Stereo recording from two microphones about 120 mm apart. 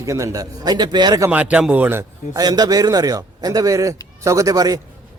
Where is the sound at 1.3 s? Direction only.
10° right (ahead or behind).